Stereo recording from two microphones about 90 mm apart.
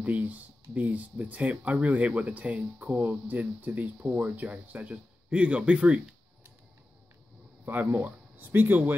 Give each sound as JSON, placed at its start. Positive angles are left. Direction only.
{"t": 0.0, "sound": "speech", "side_deg": -15}
{"t": 7.6, "sound": "speech", "side_deg": -20}